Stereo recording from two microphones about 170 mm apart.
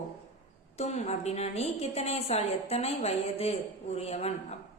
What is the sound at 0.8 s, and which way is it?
A woman's voice, 40° left (ahead or behind).